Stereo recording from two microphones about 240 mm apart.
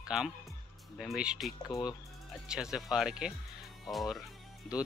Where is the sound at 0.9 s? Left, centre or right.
Centre.